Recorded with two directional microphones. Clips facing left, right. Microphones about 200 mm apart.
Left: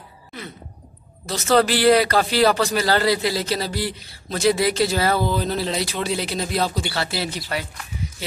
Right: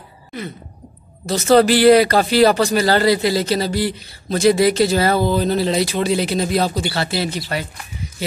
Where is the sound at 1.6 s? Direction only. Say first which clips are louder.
Right 5 dB; centre (ahead or behind).